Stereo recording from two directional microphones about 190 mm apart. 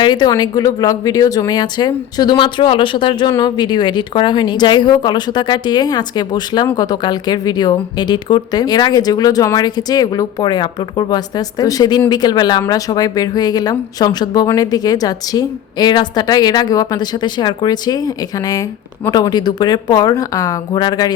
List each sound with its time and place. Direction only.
0.0 s a woman's voice: 20° left (ahead or behind)